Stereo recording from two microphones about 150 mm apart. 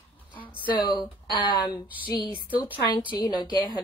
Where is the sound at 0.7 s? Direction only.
30° left (ahead or behind).